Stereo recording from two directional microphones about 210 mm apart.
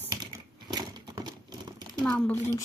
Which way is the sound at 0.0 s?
15° right (ahead or behind).